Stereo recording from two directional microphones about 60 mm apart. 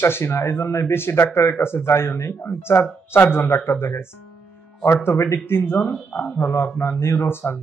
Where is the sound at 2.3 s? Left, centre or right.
Left.